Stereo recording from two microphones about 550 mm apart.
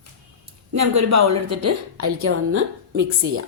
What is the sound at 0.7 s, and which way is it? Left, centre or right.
Speech, right.